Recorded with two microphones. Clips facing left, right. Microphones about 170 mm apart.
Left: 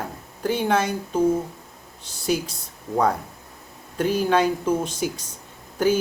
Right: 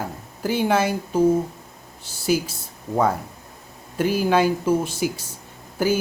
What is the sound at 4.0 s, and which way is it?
Speech, 5° right (ahead or behind).